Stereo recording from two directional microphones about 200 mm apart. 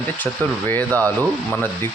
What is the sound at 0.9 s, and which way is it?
Speech, 15° right (ahead or behind).